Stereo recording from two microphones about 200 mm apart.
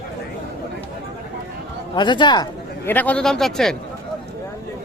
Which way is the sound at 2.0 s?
20° left (ahead or behind).